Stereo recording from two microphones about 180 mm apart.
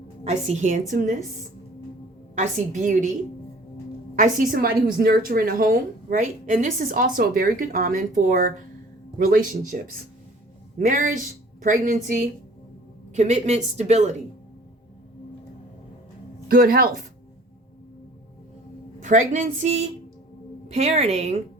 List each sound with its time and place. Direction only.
0.3 s speech: 40° right (ahead or behind)
2.3 s speech: 40° right (ahead or behind)
4.1 s a woman's voice: 50° right (ahead or behind)
13.1 s speech: 40° right (ahead or behind)
16.5 s a woman's voice: 55° right (ahead or behind)
19.0 s a woman's voice: 45° right (ahead or behind)